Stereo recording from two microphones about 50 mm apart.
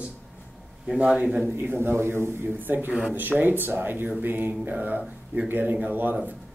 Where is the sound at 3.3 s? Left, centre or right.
Right.